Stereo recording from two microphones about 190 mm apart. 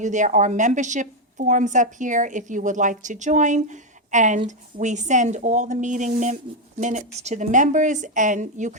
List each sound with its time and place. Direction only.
0.0 s a woman's voice: 40° right (ahead or behind)